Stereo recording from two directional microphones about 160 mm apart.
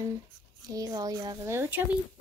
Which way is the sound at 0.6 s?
20° right (ahead or behind).